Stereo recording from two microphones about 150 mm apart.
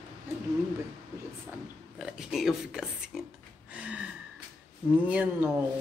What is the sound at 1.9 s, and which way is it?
Speech, 5° right (ahead or behind).